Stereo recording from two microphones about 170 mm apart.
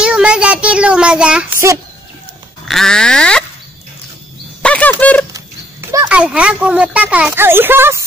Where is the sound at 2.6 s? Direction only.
5° left (ahead or behind).